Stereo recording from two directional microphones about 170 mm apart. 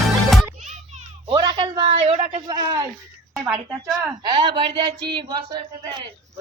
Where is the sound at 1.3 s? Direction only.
30° right (ahead or behind).